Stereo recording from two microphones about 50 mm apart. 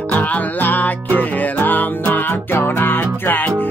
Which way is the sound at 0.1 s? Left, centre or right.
Left.